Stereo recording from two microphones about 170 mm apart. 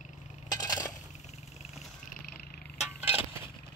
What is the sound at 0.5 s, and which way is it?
Coin, 25° left (ahead or behind).